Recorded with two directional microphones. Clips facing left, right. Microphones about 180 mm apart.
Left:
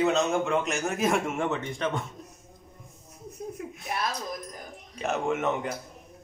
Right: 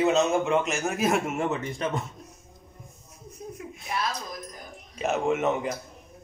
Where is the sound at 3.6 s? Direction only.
45° left (ahead or behind).